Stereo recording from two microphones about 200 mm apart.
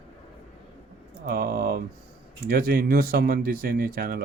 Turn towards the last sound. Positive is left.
turn(degrees=-45)  # may be behind; listen again after turning